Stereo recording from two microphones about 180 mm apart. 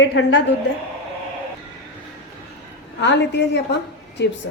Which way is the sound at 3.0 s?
75° left (ahead or behind).